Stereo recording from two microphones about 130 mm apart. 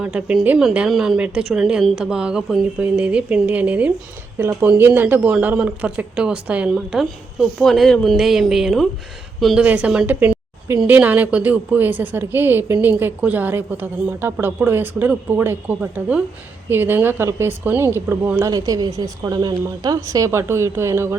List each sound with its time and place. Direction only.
0.0 s a woman's voice: 10° right (ahead or behind)